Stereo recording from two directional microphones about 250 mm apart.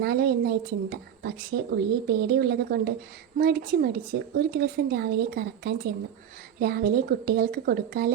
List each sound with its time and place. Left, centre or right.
0.0 s a woman's voice: right